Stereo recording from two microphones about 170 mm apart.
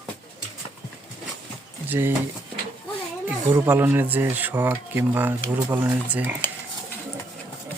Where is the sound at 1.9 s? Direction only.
15° right (ahead or behind).